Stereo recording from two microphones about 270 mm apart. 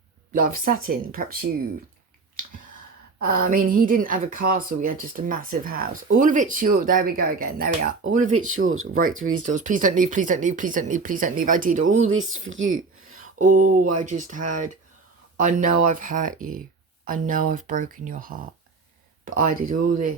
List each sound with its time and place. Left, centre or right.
0.3 s speech: right
3.2 s speech: right
3.5 s speech: right
8.4 s speech: right
9.5 s speech: right
12.1 s speech: right
14.0 s speech: right
15.6 s speech: right
16.0 s speech: right
19.4 s speech: right
19.7 s speech: right